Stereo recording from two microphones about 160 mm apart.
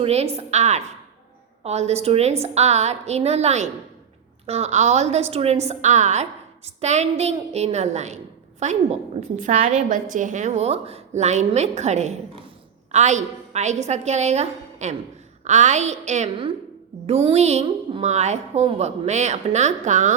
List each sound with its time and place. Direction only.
0.0 s a woman's voice: 40° right (ahead or behind)